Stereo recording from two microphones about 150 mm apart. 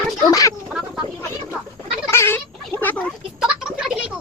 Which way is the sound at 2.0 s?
15° left (ahead or behind).